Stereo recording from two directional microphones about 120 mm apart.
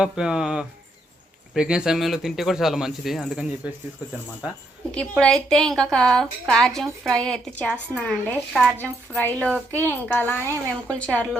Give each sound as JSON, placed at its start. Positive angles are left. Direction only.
{"t": 0.0, "sound": "speech", "side_deg": -5}
{"t": 5.2, "sound": "a woman's voice", "side_deg": 5}